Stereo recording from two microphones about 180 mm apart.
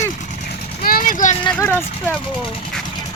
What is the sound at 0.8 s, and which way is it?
Speech, 55° left (ahead or behind).